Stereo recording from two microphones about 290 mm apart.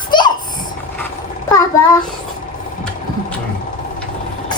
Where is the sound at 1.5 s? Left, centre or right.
Centre.